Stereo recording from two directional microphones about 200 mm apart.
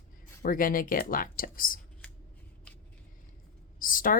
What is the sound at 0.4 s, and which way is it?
Speech, 45° left (ahead or behind).